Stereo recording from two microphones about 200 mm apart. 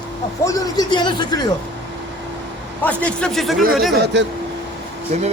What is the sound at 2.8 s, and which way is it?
Speech, 5° left (ahead or behind).